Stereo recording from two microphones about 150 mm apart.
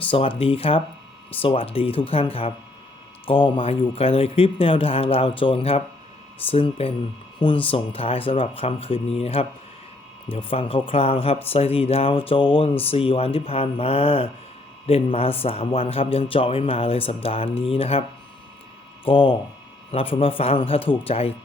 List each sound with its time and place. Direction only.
0.0 s a man's voice: 35° left (ahead or behind)
19.0 s a man's voice: 35° left (ahead or behind)